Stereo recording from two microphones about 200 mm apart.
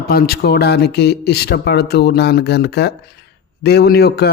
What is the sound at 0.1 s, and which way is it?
Speech, 50° left (ahead or behind).